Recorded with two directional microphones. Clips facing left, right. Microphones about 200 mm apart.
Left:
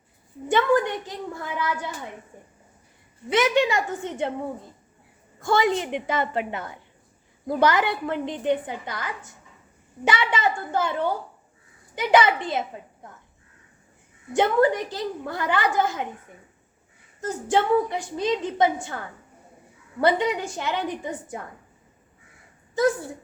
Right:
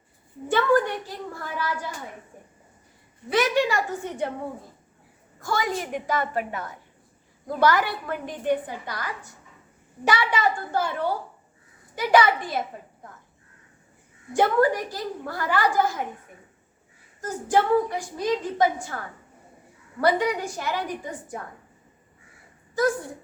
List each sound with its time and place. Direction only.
0.4 s a woman's voice: 20° left (ahead or behind)
3.2 s a woman's voice: 20° left (ahead or behind)
5.4 s a woman's voice: 25° left (ahead or behind)
11.9 s a woman's voice: 20° left (ahead or behind)
14.3 s a woman's voice: 25° left (ahead or behind)
17.2 s a woman's voice: 25° left (ahead or behind)
20.0 s a woman's voice: 25° left (ahead or behind)